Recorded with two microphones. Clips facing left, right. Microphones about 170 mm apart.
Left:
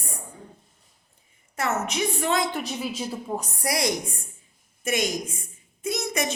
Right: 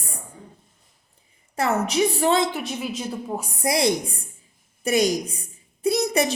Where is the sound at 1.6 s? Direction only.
35° right (ahead or behind).